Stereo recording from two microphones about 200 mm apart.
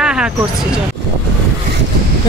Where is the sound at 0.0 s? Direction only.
5° right (ahead or behind).